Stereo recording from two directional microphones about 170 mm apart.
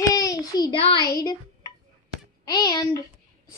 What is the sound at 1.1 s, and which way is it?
Speech, 20° left (ahead or behind).